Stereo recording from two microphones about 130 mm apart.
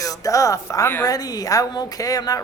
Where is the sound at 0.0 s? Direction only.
25° left (ahead or behind).